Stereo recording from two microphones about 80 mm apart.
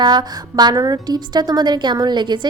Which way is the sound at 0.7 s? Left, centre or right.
Right.